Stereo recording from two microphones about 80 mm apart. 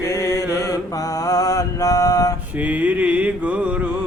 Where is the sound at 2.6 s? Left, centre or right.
Centre.